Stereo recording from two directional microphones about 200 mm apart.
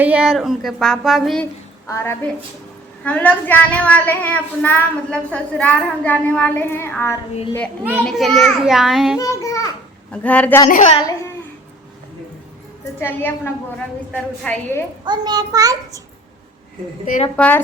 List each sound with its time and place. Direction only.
0.0 s speech: 5° right (ahead or behind)
1.9 s a woman's voice: 15° left (ahead or behind)
8.0 s speech: centre (ahead or behind)
9.1 s a woman's voice: 15° left (ahead or behind)
10.7 s a woman's voice: 35° left (ahead or behind)
13.0 s a woman's voice: 10° left (ahead or behind)
15.0 s a child's voice: 20° right (ahead or behind)
17.3 s a woman's voice: 5° left (ahead or behind)